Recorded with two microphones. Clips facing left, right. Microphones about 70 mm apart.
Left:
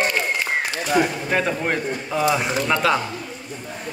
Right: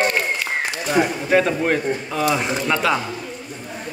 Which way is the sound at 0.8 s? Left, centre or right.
Centre.